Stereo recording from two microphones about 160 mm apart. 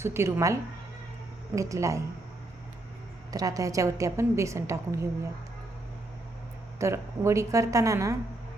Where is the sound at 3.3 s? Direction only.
20° right (ahead or behind).